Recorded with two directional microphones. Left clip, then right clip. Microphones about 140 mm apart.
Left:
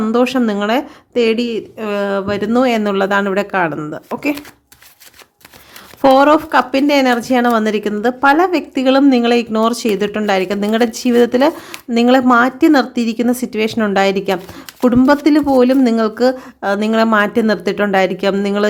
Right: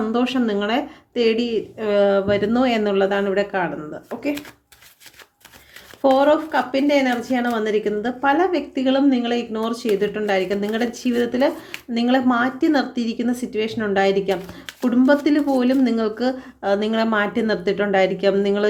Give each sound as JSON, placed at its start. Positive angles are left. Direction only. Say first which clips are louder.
{"t": 0.0, "sound": "speech", "louder": "left 7 dB", "side_deg": 55}
{"t": 6.0, "sound": "a woman's voice", "louder": "left 6 dB", "side_deg": 70}